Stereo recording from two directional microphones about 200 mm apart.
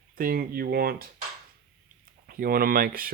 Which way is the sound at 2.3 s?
45° right (ahead or behind).